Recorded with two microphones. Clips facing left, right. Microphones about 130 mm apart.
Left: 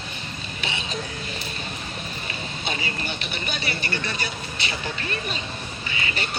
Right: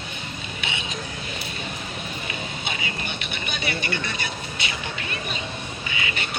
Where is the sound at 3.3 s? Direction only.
35° left (ahead or behind).